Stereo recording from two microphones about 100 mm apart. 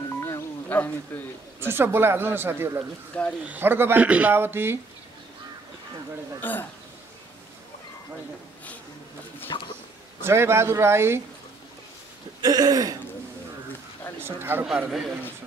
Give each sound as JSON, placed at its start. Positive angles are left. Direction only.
{"t": 0.1, "sound": "music", "side_deg": 25}
{"t": 1.6, "sound": "speech", "side_deg": -20}
{"t": 6.4, "sound": "speech", "side_deg": 20}
{"t": 9.5, "sound": "speech", "side_deg": 45}
{"t": 10.2, "sound": "speech", "side_deg": -25}
{"t": 12.4, "sound": "throat clearing", "side_deg": -40}
{"t": 14.2, "sound": "speech", "side_deg": -20}
{"t": 14.9, "sound": "a man's voice", "side_deg": 0}